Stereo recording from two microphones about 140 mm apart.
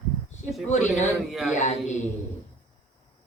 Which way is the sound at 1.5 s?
60° left (ahead or behind).